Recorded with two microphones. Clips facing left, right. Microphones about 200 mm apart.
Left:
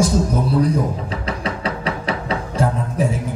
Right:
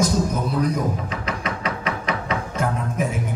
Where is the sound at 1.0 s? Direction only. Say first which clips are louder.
Left 3 dB; 30° left (ahead or behind).